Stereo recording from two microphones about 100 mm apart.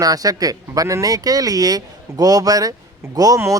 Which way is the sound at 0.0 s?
35° right (ahead or behind).